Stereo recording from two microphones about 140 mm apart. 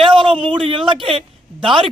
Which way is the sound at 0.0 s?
35° right (ahead or behind).